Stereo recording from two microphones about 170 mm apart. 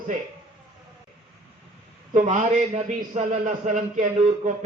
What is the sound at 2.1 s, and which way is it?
A man's voice, 45° right (ahead or behind).